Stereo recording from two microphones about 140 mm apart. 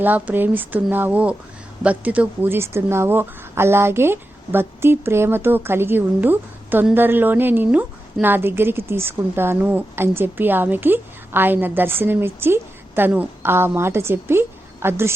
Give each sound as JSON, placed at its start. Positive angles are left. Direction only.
{"t": 0.0, "sound": "speech", "side_deg": -10}